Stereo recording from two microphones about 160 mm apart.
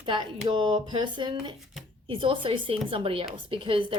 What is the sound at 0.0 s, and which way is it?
A woman's voice, 30° right (ahead or behind).